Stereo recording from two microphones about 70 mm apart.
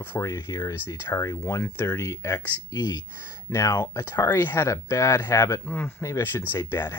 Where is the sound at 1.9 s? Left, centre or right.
Left.